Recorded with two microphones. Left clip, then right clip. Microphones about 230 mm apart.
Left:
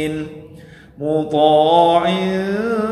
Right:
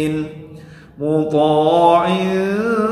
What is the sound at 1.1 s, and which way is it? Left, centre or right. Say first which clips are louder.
Music: left 1 dB; centre.